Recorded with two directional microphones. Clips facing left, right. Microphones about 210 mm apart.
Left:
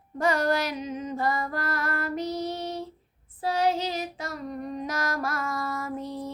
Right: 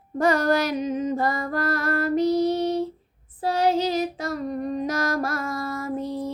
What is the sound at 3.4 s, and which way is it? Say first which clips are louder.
Female singing: right 4 dB; 35° right (ahead or behind).